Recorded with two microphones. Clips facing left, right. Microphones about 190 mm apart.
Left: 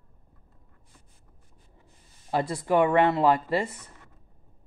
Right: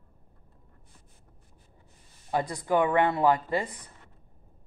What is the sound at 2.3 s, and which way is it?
Speech, 25° left (ahead or behind).